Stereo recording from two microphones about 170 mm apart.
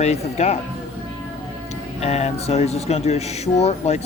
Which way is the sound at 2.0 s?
40° left (ahead or behind).